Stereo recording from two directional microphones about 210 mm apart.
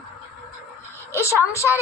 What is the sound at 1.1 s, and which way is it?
Speech, 15° left (ahead or behind).